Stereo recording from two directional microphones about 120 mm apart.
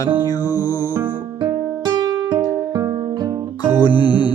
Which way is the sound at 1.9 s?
35° right (ahead or behind).